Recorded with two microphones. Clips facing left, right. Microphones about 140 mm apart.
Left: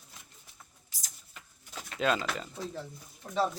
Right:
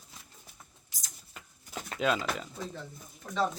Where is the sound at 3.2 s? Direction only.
10° left (ahead or behind).